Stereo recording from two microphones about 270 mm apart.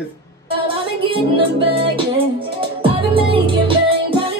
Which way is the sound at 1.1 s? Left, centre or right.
Centre.